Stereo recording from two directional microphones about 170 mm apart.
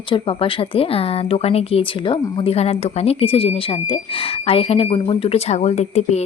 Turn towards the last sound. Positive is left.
turn(degrees=40)  # may be behind; listen again after turning